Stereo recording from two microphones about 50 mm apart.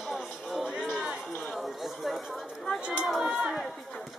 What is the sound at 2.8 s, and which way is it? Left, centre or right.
Speech, right.